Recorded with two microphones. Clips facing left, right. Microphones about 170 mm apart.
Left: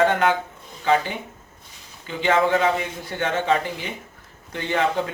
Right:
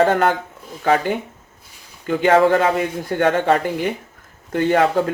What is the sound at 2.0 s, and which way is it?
Speech, 55° right (ahead or behind).